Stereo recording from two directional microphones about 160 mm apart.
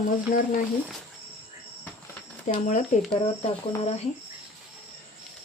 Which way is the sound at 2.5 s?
50° left (ahead or behind).